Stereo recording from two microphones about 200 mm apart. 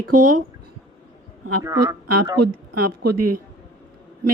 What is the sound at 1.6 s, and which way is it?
Speech, 15° right (ahead or behind).